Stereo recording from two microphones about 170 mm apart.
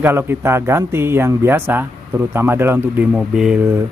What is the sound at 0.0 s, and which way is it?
Speech, 10° right (ahead or behind).